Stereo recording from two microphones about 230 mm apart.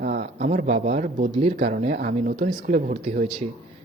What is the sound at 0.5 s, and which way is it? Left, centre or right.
Speech, right.